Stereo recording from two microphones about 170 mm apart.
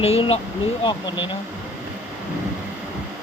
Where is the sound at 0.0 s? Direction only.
35° left (ahead or behind).